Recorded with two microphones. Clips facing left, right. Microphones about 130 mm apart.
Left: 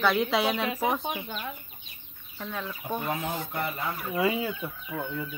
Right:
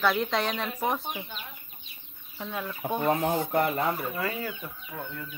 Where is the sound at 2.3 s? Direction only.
10° right (ahead or behind).